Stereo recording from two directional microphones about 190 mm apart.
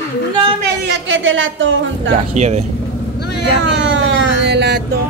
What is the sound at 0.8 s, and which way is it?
A woman's voice, 80° right.